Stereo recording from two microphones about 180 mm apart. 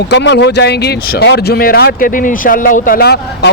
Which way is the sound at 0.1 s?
70° left (ahead or behind).